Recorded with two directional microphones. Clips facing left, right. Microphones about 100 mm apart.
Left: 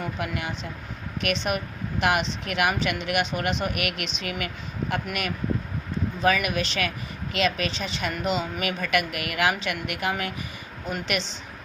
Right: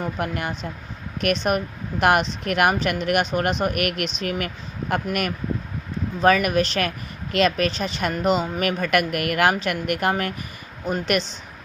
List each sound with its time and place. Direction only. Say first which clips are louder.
0.0 s a woman's voice: right 4 dB; 45° right (ahead or behind)